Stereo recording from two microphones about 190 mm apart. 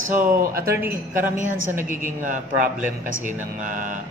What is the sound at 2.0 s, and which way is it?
Speech, 45° right (ahead or behind).